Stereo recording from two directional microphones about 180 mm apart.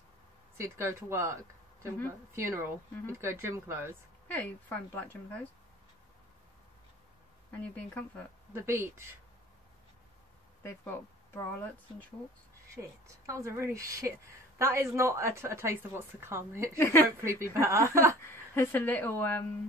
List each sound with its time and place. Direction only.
0.6 s a woman's voice: 15° right (ahead or behind)
4.3 s speech: 10° left (ahead or behind)
7.6 s speech: 5° left (ahead or behind)
8.5 s a woman's voice: 15° right (ahead or behind)
10.6 s speech: 15° left (ahead or behind)
13.0 s a woman's voice: 15° right (ahead or behind)
16.7 s speech: 10° left (ahead or behind)
17.2 s a woman's voice: 15° right (ahead or behind)
18.2 s speech: 10° left (ahead or behind)